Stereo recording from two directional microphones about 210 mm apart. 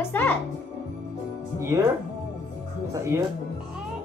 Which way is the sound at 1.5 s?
10° right (ahead or behind).